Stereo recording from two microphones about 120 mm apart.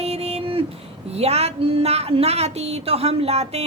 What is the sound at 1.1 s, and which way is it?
A woman's voice, 60° right (ahead or behind).